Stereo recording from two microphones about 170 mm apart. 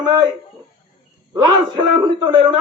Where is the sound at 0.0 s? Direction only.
25° right (ahead or behind).